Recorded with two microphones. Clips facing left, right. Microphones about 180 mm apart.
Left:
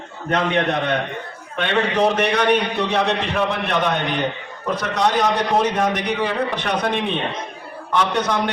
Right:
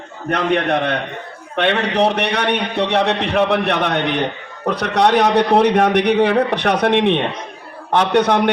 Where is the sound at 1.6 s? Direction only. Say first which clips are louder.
Right 2 dB; 65° right (ahead or behind).